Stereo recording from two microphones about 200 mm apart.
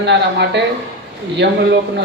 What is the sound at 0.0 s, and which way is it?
A man's voice, 60° right (ahead or behind).